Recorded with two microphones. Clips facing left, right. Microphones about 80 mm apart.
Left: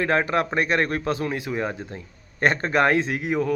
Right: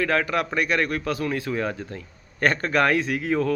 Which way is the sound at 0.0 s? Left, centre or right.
Left.